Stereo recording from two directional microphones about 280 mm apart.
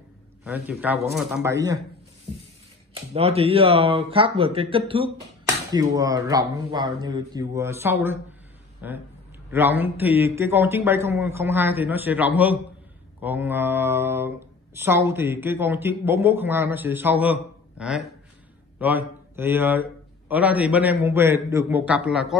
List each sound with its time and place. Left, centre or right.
0.4 s a man's voice: centre
2.9 s speech: right; by 22.4 s centre